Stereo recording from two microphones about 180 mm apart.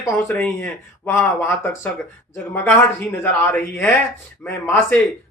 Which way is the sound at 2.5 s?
10° left (ahead or behind).